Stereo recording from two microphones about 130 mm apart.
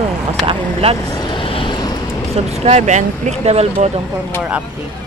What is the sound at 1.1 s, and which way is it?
Vehicle, 40° left (ahead or behind).